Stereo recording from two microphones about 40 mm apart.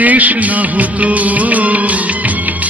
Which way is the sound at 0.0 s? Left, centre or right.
Right.